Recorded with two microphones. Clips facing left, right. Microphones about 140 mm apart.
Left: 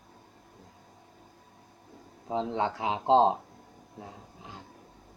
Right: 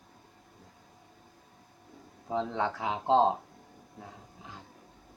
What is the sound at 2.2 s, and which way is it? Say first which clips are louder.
Speech: left 1 dB; 20° left (ahead or behind).